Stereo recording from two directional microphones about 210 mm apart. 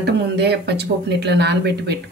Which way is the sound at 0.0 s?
50° right (ahead or behind).